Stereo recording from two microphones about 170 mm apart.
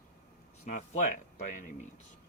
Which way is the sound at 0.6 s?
45° left (ahead or behind).